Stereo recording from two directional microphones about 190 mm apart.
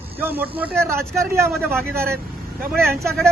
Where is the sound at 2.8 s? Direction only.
15° right (ahead or behind).